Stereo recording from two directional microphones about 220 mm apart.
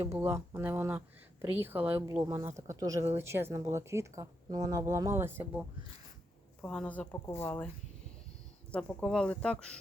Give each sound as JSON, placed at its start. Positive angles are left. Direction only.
{"t": 0.0, "sound": "speech", "side_deg": -10}
{"t": 6.6, "sound": "a woman's voice", "side_deg": 5}
{"t": 8.7, "sound": "speech", "side_deg": 5}